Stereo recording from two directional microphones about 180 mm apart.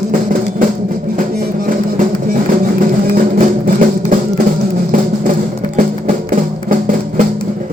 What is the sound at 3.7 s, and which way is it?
Music, 50° right (ahead or behind).